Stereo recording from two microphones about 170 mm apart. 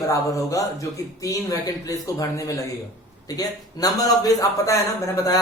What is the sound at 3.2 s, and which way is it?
A man's voice, 20° left (ahead or behind).